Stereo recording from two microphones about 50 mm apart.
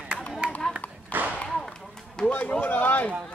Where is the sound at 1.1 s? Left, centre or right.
Right.